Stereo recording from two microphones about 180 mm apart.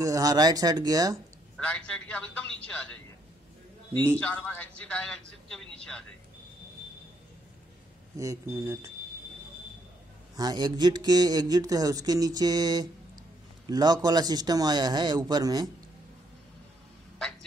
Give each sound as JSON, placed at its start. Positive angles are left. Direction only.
{"t": 0.0, "sound": "speech", "side_deg": -20}
{"t": 1.6, "sound": "a man's voice", "side_deg": 5}
{"t": 4.2, "sound": "speech", "side_deg": 10}
{"t": 8.2, "sound": "speech", "side_deg": -15}
{"t": 10.3, "sound": "a man's voice", "side_deg": -20}